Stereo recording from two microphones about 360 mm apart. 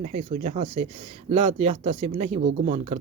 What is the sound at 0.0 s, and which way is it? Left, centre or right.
Speech, centre.